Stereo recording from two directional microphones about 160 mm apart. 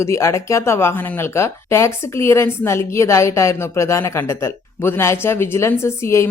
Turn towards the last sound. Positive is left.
turn(degrees=15)  # may be behind; listen again after turning